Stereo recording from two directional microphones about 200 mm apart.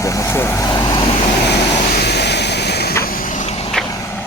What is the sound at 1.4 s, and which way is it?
Vehicle, 60° left (ahead or behind).